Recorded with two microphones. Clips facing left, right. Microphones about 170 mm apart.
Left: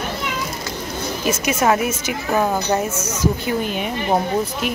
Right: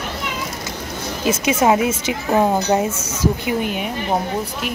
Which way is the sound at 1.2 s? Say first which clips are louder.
Right 3 dB; 20° right (ahead or behind).